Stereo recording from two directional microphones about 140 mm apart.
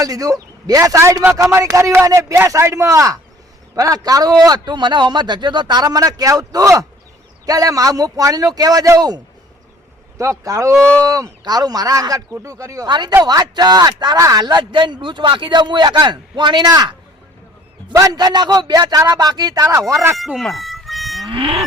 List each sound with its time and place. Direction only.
0.0 s a man's voice: 25° right (ahead or behind)
17.9 s a man's voice: 25° right (ahead or behind)
20.1 s livestock: centre (ahead or behind)
21.2 s speech: 40° right (ahead or behind)